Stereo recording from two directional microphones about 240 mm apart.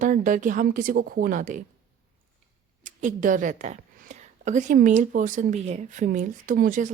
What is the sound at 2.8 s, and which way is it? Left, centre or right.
A woman's voice, right.